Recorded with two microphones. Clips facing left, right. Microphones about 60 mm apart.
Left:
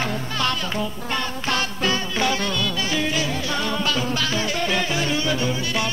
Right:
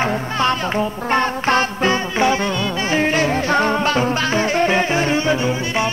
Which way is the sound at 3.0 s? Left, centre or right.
Right.